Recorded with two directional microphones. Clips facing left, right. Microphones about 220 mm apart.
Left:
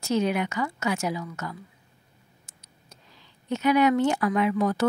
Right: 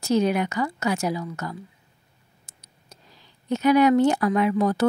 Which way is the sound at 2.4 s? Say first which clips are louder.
Left 1 dB; 35° right (ahead or behind).